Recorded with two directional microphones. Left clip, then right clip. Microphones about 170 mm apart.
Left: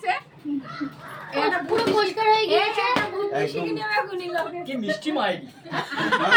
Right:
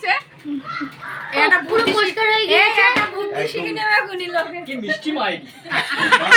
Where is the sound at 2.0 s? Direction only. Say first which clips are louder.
Right 3 dB; 40° right (ahead or behind).